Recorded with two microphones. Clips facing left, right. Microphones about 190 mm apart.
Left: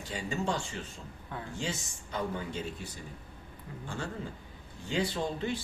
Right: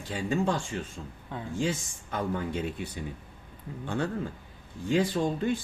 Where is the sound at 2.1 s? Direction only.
55° right (ahead or behind).